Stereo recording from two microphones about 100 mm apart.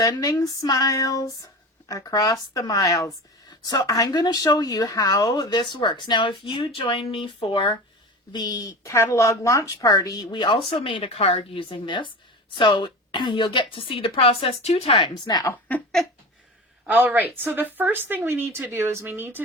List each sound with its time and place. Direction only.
0.0 s speech: 40° left (ahead or behind); by 7.8 s 60° left (ahead or behind)
8.3 s speech: 45° left (ahead or behind)
10.7 s a woman's voice: 60° left (ahead or behind); by 15.4 s 45° left (ahead or behind)
16.8 s speech: 15° right (ahead or behind)